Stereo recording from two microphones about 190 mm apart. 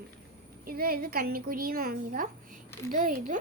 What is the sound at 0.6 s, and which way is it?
A woman's voice, 50° right (ahead or behind).